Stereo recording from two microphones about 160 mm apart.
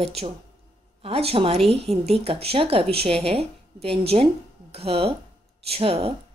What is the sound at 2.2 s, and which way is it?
Speech, 35° right (ahead or behind).